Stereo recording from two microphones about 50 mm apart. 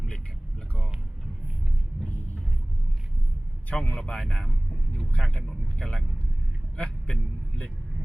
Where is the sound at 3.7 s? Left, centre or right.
Centre.